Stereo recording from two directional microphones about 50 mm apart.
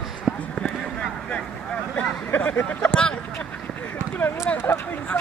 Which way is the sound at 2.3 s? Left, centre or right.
Left.